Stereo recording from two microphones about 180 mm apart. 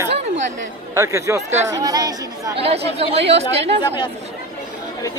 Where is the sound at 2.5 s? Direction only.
35° right (ahead or behind).